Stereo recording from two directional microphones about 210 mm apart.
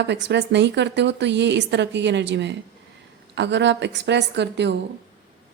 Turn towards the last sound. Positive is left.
turn(degrees=-55)  # may be behind; listen again after turning